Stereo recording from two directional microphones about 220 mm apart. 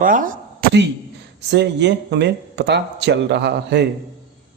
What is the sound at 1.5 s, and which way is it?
Speech, 50° right (ahead or behind).